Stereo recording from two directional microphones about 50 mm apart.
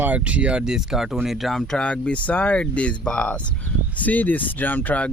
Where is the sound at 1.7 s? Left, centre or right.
Centre.